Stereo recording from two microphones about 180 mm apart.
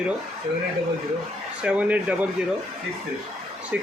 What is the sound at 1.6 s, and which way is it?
Speech, 5° right (ahead or behind).